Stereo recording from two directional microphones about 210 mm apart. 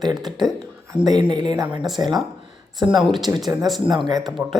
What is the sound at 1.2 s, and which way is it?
Speech, 20° right (ahead or behind).